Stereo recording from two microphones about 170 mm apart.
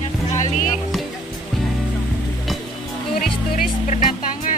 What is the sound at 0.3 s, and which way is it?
Music, 45° left (ahead or behind).